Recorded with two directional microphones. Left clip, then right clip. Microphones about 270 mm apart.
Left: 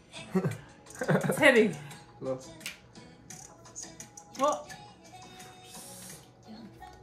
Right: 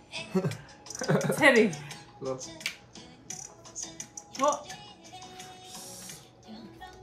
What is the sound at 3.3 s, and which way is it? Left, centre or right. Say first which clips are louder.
Music: right 6 dB; centre.